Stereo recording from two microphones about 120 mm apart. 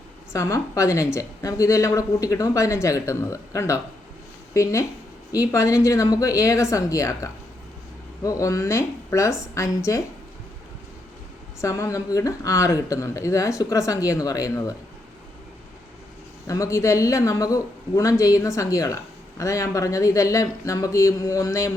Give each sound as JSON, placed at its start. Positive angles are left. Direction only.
{"t": 0.3, "sound": "a woman's voice", "side_deg": 25}
{"t": 11.6, "sound": "a woman's voice", "side_deg": 25}
{"t": 16.5, "sound": "a woman's voice", "side_deg": 25}